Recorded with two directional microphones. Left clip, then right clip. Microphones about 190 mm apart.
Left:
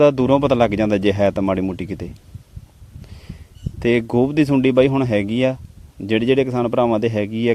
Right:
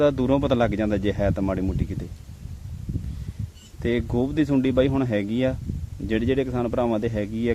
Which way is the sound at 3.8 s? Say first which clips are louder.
Left 8 dB; 45° left (ahead or behind).